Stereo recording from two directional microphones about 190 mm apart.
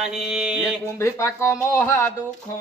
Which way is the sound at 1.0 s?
15° left (ahead or behind).